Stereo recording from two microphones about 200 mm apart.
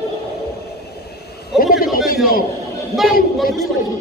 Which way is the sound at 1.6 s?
45° left (ahead or behind).